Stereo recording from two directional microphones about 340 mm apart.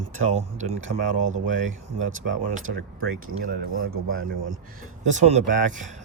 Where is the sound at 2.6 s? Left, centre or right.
Right.